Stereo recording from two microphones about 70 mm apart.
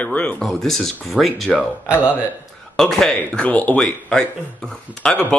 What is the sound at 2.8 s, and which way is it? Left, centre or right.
Speech, centre.